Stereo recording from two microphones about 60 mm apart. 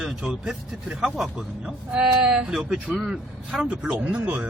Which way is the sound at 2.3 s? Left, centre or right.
Centre.